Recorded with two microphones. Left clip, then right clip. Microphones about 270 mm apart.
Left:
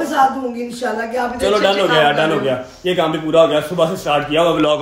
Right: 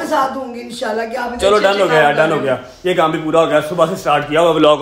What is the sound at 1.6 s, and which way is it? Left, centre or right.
A man's voice, centre.